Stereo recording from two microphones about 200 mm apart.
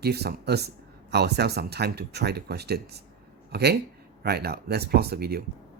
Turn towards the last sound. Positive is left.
turn(degrees=-50)  # may be behind; listen again after turning